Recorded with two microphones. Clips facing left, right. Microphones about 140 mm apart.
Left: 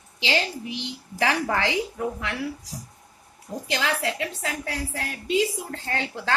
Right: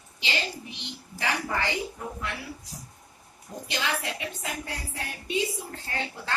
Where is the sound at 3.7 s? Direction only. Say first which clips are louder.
Left 4 dB; 90° left.